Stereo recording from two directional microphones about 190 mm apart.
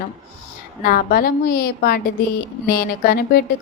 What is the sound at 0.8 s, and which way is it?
A woman's voice, 50° left (ahead or behind).